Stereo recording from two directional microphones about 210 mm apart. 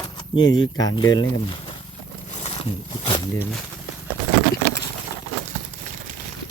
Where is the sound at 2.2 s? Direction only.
30° left (ahead or behind).